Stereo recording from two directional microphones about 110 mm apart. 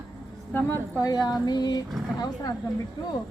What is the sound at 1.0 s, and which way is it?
Speech, 40° left (ahead or behind).